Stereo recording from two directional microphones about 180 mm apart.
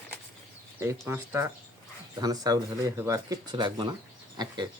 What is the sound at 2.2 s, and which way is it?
Speech, 20° right (ahead or behind).